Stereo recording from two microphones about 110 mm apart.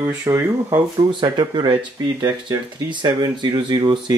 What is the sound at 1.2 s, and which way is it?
Speech, 40° right (ahead or behind).